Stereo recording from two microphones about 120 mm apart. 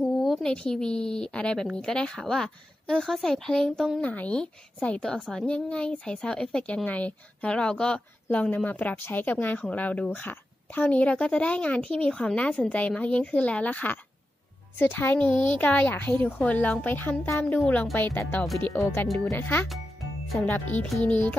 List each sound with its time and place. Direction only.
0.2 s speech: 5° left (ahead or behind)
20.8 s speech: 5° left (ahead or behind)